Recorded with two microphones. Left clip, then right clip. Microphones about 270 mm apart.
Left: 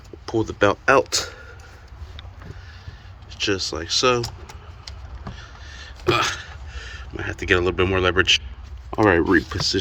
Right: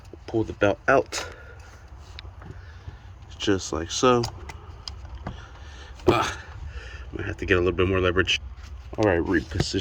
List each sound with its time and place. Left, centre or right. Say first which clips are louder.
0.3 s speech: left 4 dB; centre
3.2 s speech: left 2 dB; right
6.1 s speech: left 2 dB; right
9.0 s speech: left 6 dB; left